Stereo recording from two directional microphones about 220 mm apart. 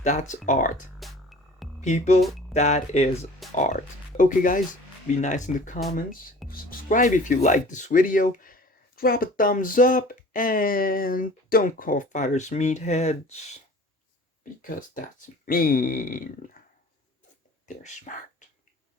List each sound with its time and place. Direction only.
0.0 s speech: 35° left (ahead or behind)
0.9 s music: centre (ahead or behind)
1.8 s speech: 30° left (ahead or behind)
14.6 s speech: 40° left (ahead or behind)
17.7 s speech: 35° left (ahead or behind)